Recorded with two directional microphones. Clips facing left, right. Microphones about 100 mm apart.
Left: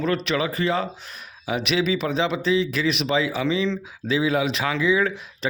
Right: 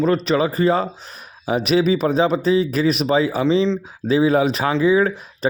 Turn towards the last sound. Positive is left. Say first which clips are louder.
# right 5 dB
turn(degrees=-40)  # may be behind; listen again after turning